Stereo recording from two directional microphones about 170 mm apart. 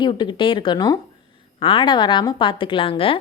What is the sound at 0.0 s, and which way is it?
Speech, 30° left (ahead or behind).